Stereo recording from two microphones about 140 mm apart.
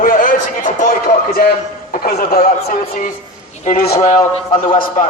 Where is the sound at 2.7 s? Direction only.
70° left (ahead or behind).